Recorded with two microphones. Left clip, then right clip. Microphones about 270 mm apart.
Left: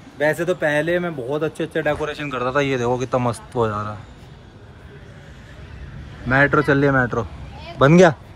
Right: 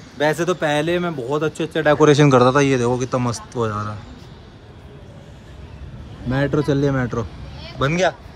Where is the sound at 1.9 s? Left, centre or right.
Right.